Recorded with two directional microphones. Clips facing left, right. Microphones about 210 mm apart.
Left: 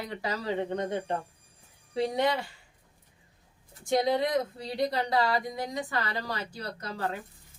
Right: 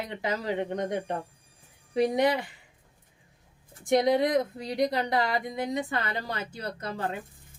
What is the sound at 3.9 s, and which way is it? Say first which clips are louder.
Speech: right 3 dB; 20° right (ahead or behind).